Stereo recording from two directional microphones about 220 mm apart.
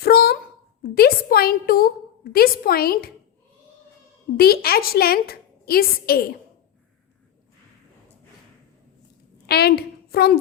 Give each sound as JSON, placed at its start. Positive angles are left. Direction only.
{"t": 0.0, "sound": "a sound", "side_deg": 45}
{"t": 0.8, "sound": "a woman's voice", "side_deg": 45}
{"t": 4.4, "sound": "a woman's voice", "side_deg": 45}
{"t": 9.5, "sound": "a woman's voice", "side_deg": 45}